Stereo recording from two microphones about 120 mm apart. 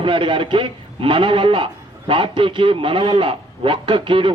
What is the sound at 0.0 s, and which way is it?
A man's voice, 45° right (ahead or behind).